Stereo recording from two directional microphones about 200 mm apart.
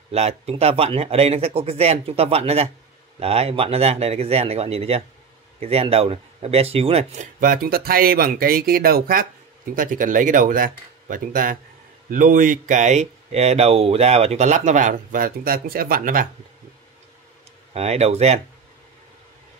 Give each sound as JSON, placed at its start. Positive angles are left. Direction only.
{"t": 0.1, "sound": "speech", "side_deg": -30}
{"t": 17.7, "sound": "speech", "side_deg": -30}